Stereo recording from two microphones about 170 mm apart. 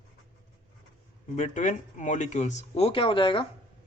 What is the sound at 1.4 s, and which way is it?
Speech, 45° left (ahead or behind).